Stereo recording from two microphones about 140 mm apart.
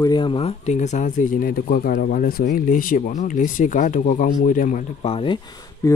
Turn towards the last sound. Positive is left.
turn(degrees=30)  # may be behind; listen again after turning